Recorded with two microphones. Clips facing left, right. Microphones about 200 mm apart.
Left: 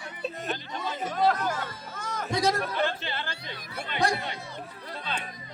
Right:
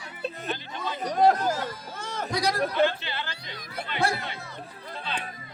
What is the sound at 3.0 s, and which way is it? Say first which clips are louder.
Music: left 1 dB; 50° left (ahead or behind).